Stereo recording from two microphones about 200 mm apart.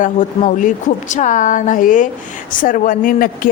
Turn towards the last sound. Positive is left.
turn(degrees=45)  # may be behind; listen again after turning